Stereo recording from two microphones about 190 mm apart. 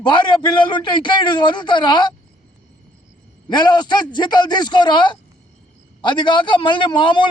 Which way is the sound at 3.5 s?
25° left (ahead or behind).